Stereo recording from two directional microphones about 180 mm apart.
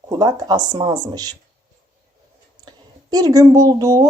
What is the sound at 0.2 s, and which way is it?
Speech, 20° right (ahead or behind).